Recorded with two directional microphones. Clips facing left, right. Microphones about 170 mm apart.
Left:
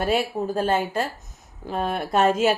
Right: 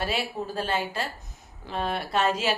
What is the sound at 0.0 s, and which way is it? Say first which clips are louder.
A woman's voice: left 7 dB; 50° left (ahead or behind).